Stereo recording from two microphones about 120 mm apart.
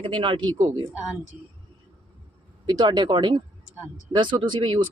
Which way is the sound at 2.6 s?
35° right (ahead or behind).